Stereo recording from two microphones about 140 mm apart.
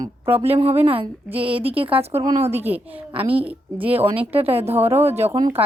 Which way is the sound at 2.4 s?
50° right (ahead or behind).